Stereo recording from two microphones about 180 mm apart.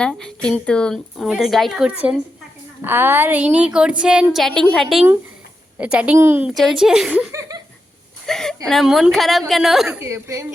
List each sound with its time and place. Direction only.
0.0 s a woman's voice: 5° left (ahead or behind); by 6.5 s 10° right (ahead or behind)
6.5 s a woman's voice: centre (ahead or behind); by 7.6 s 20° right (ahead or behind)
8.3 s a woman's voice: 5° left (ahead or behind)
10.0 s a woman's voice: 15° right (ahead or behind)